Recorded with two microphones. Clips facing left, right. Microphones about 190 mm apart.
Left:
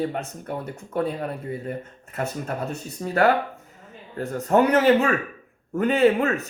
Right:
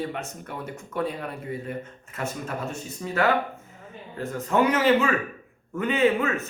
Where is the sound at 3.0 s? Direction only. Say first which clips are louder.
Left 4 dB; 40° left (ahead or behind).